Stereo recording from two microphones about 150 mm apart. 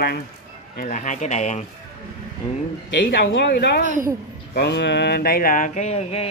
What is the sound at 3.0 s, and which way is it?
Speech, 90° left.